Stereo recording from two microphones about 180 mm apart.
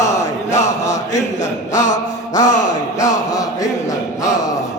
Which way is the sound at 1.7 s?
40° left (ahead or behind).